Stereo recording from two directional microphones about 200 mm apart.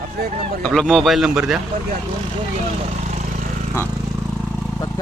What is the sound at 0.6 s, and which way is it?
Speech, 5° left (ahead or behind).